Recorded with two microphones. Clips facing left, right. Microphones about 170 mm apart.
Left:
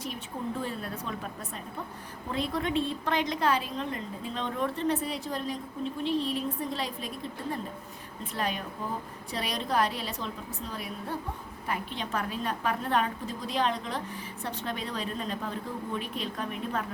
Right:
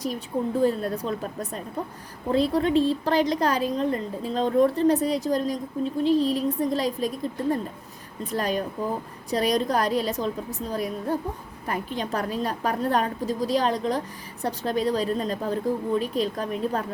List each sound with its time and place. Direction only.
0.6 s a woman's voice: 40° right (ahead or behind)
8.2 s a woman's voice: 40° right (ahead or behind)